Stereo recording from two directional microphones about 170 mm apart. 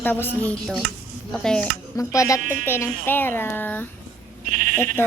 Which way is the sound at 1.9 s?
20° left (ahead or behind).